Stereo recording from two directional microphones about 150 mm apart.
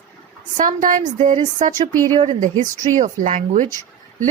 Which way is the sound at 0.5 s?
60° right (ahead or behind).